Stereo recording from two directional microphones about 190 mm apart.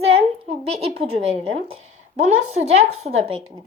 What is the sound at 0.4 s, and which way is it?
Speech, 30° right (ahead or behind).